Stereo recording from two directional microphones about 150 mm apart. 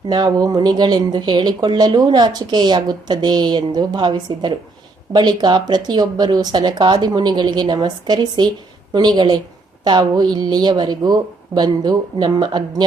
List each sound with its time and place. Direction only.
0.1 s speech: 30° right (ahead or behind)